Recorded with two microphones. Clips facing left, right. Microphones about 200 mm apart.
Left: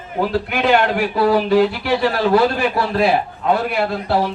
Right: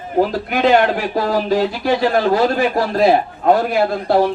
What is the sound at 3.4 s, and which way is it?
Speech, 50° right (ahead or behind).